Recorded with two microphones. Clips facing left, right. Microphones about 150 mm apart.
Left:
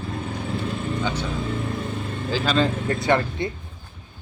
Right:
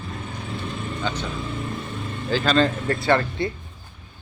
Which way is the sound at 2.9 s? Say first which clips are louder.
Even; 20° left (ahead or behind).